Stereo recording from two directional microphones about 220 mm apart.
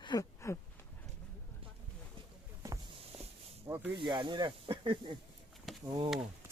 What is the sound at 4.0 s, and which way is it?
Speech, 20° right (ahead or behind).